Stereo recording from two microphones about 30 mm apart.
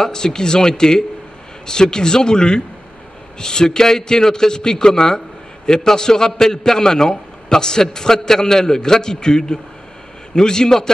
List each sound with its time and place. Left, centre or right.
0.0 s a man's voice: left